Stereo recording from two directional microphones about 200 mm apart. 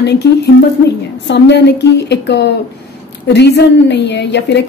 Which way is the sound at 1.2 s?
60° left (ahead or behind).